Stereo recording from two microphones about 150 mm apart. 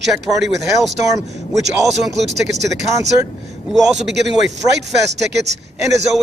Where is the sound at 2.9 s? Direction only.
20° right (ahead or behind).